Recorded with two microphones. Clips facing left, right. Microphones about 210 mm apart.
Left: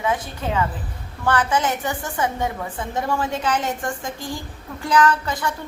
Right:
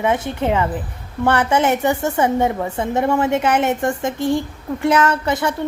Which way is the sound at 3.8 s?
25° right (ahead or behind).